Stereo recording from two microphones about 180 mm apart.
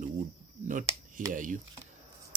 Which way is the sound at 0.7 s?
45° right (ahead or behind).